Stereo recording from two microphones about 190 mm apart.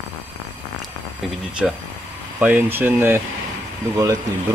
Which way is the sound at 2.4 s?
10° right (ahead or behind).